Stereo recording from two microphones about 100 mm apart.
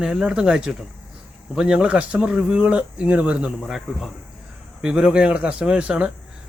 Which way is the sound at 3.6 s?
Centre (ahead or behind).